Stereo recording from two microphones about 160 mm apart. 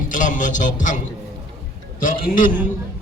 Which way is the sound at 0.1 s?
55° left (ahead or behind).